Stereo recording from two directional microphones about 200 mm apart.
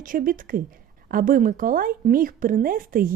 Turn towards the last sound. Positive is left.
turn(degrees=-45)  # may be behind; listen again after turning